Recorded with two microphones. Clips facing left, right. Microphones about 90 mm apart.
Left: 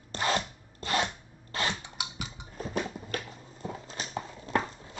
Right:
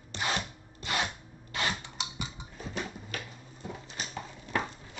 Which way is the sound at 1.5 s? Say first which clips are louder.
Left 1 dB; 35° left (ahead or behind).